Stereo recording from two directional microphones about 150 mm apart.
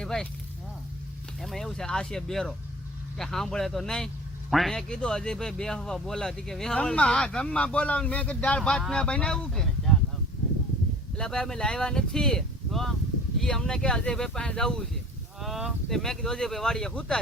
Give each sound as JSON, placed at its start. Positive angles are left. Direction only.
{"t": 0.0, "sound": "speech", "side_deg": 5}
{"t": 1.4, "sound": "speech", "side_deg": 0}
{"t": 11.2, "sound": "speech", "side_deg": 5}